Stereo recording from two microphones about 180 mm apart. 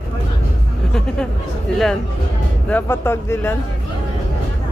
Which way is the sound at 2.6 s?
10° left (ahead or behind).